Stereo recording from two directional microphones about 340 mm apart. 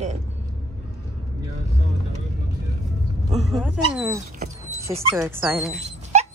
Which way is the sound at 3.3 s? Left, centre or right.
Centre.